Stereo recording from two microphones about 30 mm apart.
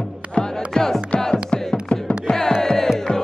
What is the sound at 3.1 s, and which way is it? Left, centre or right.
Music, left.